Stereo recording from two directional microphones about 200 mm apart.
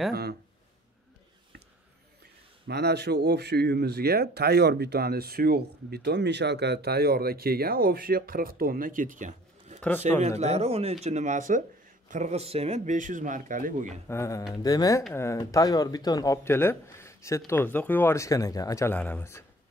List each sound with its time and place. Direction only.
0.1 s speech: 50° right (ahead or behind)
2.6 s speech: 55° right (ahead or behind); by 9.8 s 40° right (ahead or behind)
9.8 s speech: 10° left (ahead or behind)
10.4 s speech: 30° right (ahead or behind)
14.0 s speech: 15° left (ahead or behind)